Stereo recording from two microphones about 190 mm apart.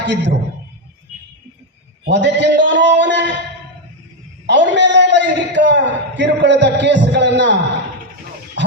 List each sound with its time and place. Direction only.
0.0 s a man's voice: 65° right (ahead or behind)
2.0 s a man's voice: 65° right (ahead or behind)
4.4 s a man's voice: 70° right (ahead or behind)